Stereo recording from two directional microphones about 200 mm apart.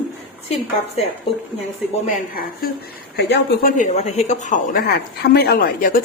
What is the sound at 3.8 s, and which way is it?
A woman's voice, 35° left (ahead or behind).